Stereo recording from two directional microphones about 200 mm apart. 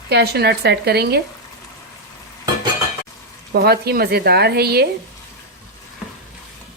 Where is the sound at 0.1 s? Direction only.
55° right (ahead or behind).